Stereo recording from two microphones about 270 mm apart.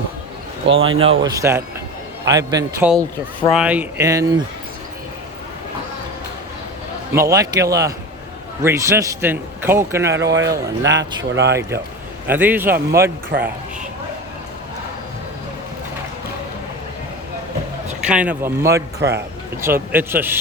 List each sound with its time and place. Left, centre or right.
0.7 s speech: right
1.2 s a man's voice: centre
7.1 s a man's voice: centre
10.2 s speech: right
12.3 s a man's voice: centre
18.0 s a man's voice: centre